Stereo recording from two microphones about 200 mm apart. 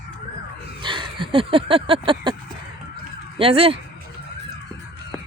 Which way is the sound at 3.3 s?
30° right (ahead or behind).